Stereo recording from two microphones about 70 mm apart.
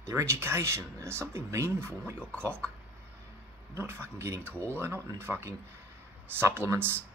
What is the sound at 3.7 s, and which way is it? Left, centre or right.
Speech, right.